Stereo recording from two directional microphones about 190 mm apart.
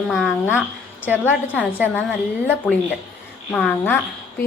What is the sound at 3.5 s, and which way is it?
Speech, 10° left (ahead or behind).